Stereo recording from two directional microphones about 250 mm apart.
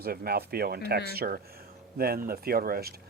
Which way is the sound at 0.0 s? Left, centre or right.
Right.